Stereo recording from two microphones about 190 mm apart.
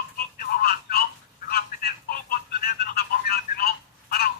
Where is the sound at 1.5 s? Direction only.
55° left (ahead or behind).